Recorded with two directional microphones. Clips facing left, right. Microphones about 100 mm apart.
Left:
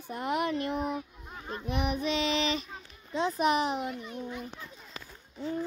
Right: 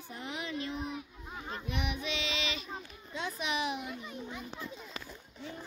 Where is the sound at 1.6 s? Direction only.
40° left (ahead or behind).